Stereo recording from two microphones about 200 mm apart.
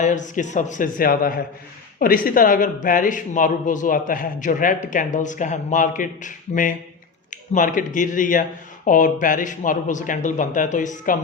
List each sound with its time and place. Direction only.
0.0 s speech: 40° left (ahead or behind)